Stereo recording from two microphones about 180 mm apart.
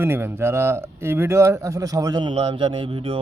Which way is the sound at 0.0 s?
15° right (ahead or behind).